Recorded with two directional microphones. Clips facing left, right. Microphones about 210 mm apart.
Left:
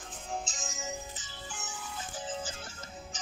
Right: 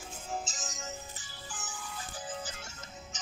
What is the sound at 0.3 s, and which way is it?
Music, centre (ahead or behind).